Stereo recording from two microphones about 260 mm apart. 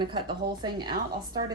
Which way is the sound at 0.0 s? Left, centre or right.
Centre.